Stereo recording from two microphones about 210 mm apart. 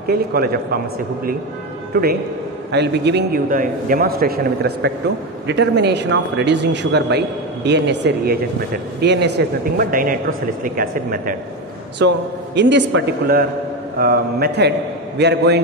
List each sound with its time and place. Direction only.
0.0 s a man's voice: 45° right (ahead or behind)
1.9 s a man's voice: 45° right (ahead or behind)
9.8 s speech: 40° right (ahead or behind)
12.0 s a man's voice: 55° right (ahead or behind)